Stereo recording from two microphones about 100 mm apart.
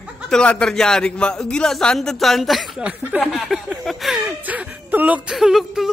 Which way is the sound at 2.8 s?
20° right (ahead or behind).